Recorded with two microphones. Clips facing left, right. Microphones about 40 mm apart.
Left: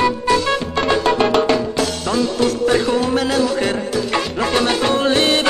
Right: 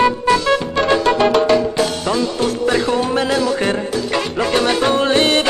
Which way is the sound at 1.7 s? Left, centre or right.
Centre.